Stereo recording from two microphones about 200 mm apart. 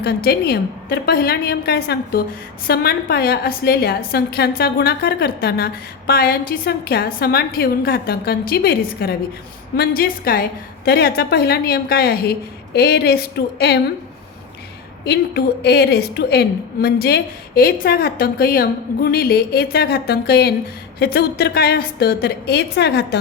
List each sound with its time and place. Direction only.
0.0 s a woman's voice: 50° left (ahead or behind)
15.0 s a woman's voice: 55° left (ahead or behind)